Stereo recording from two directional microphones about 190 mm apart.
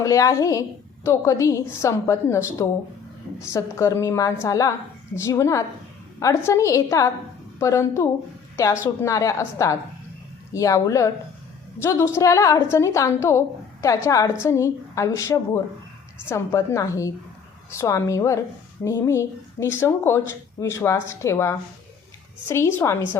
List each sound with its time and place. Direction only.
0.0 s speech: 15° left (ahead or behind)